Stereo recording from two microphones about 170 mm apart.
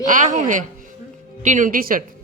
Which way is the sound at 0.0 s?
45° right (ahead or behind).